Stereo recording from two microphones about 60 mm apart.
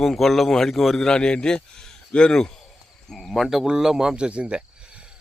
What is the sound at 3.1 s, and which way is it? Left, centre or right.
Speech, centre.